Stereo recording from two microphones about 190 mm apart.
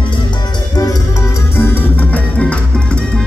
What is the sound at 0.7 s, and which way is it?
Music, 20° left (ahead or behind).